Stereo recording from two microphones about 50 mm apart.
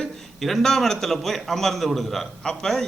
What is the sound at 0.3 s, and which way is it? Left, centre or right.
A man's voice, centre.